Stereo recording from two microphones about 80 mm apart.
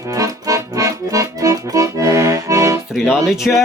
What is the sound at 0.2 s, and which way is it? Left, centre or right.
Accordion, right.